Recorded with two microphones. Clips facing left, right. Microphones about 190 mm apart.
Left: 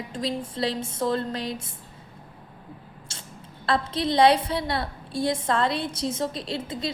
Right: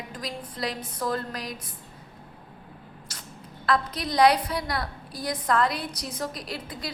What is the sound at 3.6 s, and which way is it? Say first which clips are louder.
A woman's voice: left 2 dB; 25° left (ahead or behind).